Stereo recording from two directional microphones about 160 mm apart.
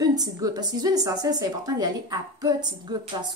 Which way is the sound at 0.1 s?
25° right (ahead or behind).